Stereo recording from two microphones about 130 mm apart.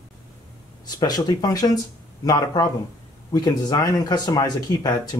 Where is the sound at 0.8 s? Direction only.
30° left (ahead or behind).